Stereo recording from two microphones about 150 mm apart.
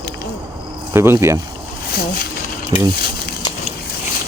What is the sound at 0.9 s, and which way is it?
Speech, 15° right (ahead or behind).